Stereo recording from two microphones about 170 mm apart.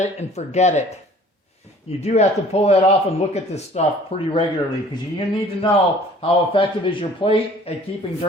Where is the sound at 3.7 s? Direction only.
40° left (ahead or behind).